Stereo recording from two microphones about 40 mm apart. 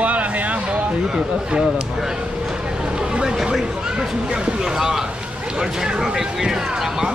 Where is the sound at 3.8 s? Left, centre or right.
Centre.